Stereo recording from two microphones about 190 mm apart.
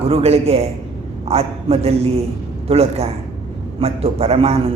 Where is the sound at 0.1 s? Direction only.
30° right (ahead or behind).